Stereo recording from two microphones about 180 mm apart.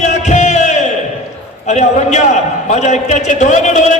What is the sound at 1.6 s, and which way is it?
A man's voice, 40° left (ahead or behind).